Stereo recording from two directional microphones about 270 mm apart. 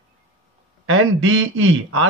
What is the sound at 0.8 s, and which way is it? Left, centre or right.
Speech, right.